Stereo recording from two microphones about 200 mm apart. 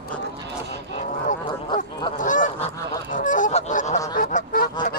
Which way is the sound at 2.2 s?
40° left (ahead or behind).